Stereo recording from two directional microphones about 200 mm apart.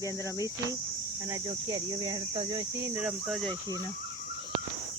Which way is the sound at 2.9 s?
5° right (ahead or behind).